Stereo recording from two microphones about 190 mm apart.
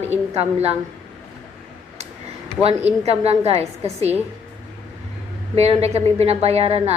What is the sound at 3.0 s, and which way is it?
A woman's voice, 35° right (ahead or behind).